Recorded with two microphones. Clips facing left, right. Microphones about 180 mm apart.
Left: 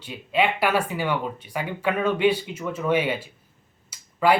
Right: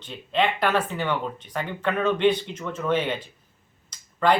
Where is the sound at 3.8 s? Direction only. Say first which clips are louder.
Left 1 dB; 10° left (ahead or behind).